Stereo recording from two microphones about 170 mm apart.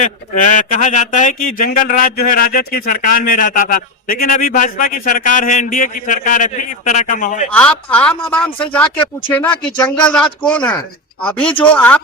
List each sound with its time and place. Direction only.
0.0 s speech: 50° left (ahead or behind)
7.5 s a man's voice: 5° left (ahead or behind)